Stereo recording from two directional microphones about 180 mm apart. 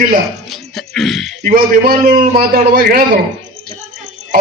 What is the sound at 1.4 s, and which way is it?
A man's voice, 55° right (ahead or behind).